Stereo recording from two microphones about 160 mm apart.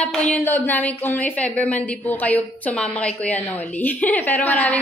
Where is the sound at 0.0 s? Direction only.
5° left (ahead or behind).